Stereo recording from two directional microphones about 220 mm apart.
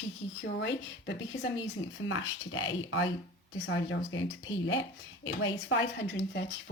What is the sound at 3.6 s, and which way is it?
A woman's voice, 55° left (ahead or behind).